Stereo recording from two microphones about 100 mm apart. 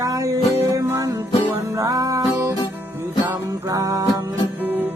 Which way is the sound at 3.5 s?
35° right (ahead or behind).